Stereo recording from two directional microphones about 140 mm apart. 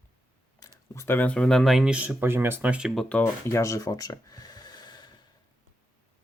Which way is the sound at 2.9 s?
5° left (ahead or behind).